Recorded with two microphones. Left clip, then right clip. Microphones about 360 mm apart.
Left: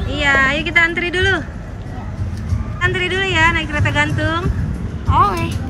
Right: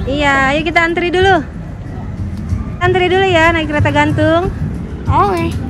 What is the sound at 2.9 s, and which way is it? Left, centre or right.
Speech, centre.